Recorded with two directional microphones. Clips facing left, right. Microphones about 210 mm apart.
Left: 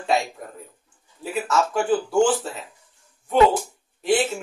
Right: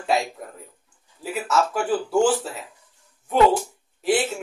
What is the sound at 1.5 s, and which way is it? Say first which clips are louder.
Speech: left 1 dB; 5° right (ahead or behind).